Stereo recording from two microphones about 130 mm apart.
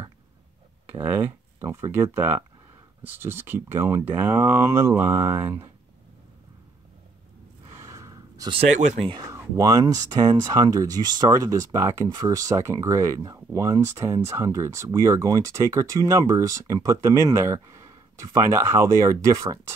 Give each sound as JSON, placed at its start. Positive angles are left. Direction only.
{"t": 0.8, "sound": "speech", "side_deg": -15}
{"t": 7.7, "sound": "gasp", "side_deg": -20}
{"t": 9.6, "sound": "speech", "side_deg": -30}